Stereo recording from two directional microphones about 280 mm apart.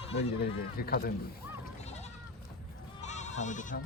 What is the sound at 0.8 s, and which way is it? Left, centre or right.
Speech, left.